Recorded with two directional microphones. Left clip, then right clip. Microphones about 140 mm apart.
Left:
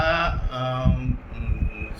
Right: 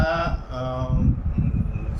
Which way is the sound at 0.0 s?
30° right (ahead or behind).